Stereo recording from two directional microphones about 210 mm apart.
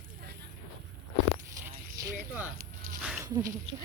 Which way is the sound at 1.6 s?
10° right (ahead or behind).